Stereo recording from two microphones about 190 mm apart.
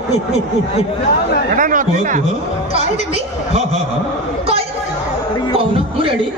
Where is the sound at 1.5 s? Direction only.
45° right (ahead or behind).